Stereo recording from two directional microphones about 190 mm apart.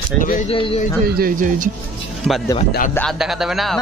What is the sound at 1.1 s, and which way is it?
Speech, 50° right (ahead or behind).